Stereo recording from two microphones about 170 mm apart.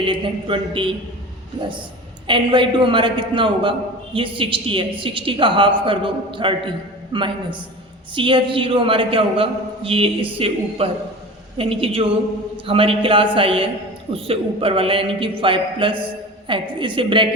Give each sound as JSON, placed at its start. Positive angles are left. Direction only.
{"t": 0.0, "sound": "a man's voice", "side_deg": -30}
{"t": 2.2, "sound": "a man's voice", "side_deg": -30}